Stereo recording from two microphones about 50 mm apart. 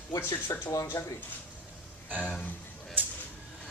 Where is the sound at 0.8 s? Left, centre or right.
Left.